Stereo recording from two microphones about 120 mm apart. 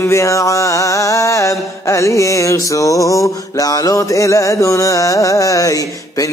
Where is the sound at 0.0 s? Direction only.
25° left (ahead or behind).